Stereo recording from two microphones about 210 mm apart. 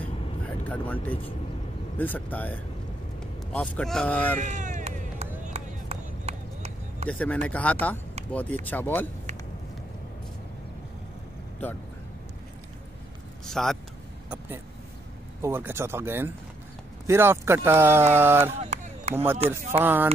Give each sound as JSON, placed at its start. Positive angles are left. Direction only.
{"t": 0.7, "sound": "speech", "side_deg": 10}
{"t": 4.4, "sound": "vehicle", "side_deg": -35}
{"t": 5.4, "sound": "run", "side_deg": -30}
{"t": 7.1, "sound": "speech", "side_deg": 5}
{"t": 13.5, "sound": "speech", "side_deg": 0}
{"t": 15.4, "sound": "speech", "side_deg": -10}
{"t": 18.6, "sound": "a sound", "side_deg": -30}
{"t": 19.8, "sound": "speech", "side_deg": -10}